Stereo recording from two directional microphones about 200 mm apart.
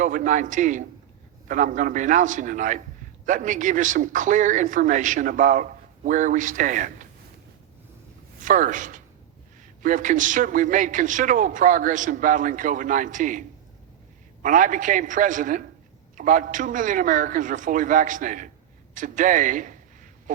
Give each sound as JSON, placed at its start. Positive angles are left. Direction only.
{"t": 0.0, "sound": "speech", "side_deg": -40}
{"t": 8.4, "sound": "speech", "side_deg": -40}
{"t": 14.4, "sound": "speech", "side_deg": -40}